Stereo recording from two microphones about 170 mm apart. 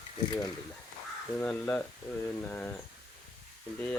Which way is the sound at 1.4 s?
10° left (ahead or behind).